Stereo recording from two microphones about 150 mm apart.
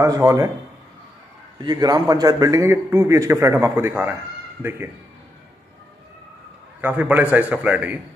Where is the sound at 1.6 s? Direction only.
25° right (ahead or behind).